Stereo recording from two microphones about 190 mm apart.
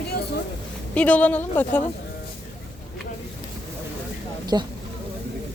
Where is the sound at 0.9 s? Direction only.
5° left (ahead or behind).